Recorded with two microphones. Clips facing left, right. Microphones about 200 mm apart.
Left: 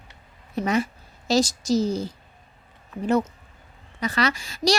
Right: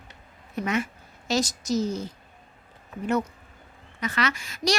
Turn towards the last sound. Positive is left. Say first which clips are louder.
# left 4 dB
turn(degrees=30)  # may be behind; listen again after turning